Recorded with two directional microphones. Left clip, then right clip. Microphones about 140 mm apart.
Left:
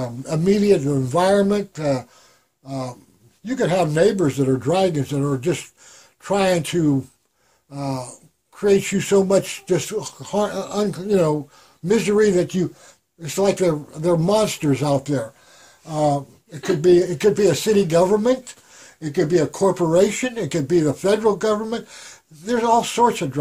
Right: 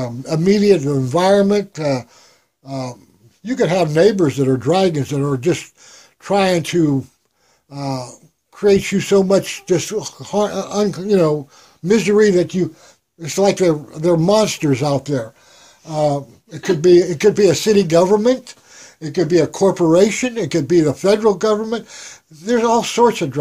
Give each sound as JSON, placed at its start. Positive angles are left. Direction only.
{"t": 0.0, "sound": "speech", "side_deg": -40}
{"t": 15.9, "sound": "speech", "side_deg": -45}